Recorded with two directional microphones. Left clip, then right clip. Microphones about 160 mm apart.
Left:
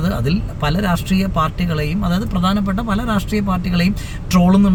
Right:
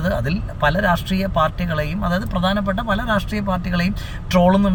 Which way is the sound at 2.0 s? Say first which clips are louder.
Even; 10° left (ahead or behind).